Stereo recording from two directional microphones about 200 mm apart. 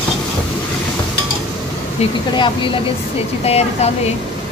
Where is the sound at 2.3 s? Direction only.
25° left (ahead or behind).